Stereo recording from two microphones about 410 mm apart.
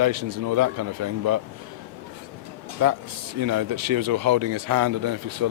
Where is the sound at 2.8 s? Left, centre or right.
Right.